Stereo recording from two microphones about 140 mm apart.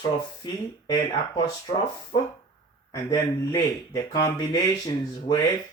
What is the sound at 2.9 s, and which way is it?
Speech, 25° left (ahead or behind).